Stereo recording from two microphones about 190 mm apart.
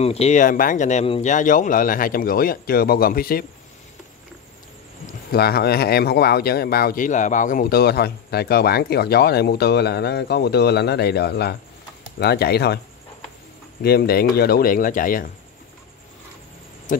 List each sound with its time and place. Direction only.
0.0 s speech: 35° left (ahead or behind); by 3.4 s 50° left (ahead or behind)
5.0 s speech: 55° left (ahead or behind)
13.8 s speech: 55° left (ahead or behind)